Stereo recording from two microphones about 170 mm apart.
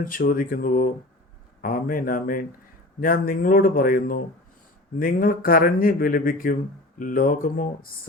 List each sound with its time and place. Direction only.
0.0 s speech: 55° left (ahead or behind)